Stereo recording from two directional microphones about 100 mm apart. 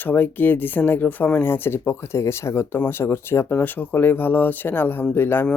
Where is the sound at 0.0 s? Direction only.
20° left (ahead or behind).